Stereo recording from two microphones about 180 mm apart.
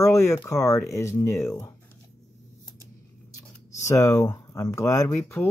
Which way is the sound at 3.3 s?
15° left (ahead or behind).